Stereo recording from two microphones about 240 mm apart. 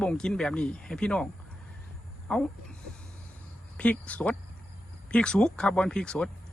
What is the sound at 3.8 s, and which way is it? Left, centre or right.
Speech, centre.